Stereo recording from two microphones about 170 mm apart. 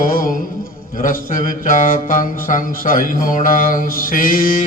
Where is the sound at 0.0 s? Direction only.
55° left (ahead or behind).